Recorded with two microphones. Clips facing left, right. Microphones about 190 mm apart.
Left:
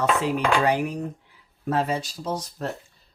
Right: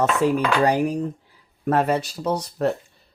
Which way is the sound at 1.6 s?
60° right (ahead or behind).